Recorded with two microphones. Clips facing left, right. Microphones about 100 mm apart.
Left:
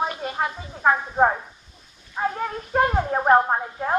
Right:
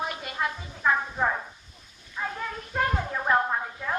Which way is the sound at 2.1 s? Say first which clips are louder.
Left 7 dB; 45° left (ahead or behind).